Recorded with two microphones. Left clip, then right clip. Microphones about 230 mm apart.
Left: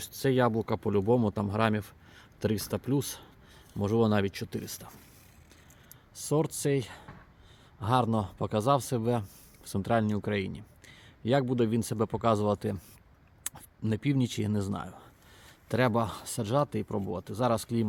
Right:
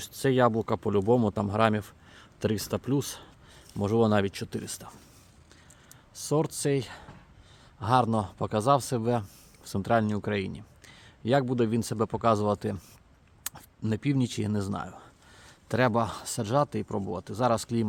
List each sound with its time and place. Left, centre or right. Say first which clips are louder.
0.0 s speech: right 3 dB; centre
6.1 s speech: right 2 dB; centre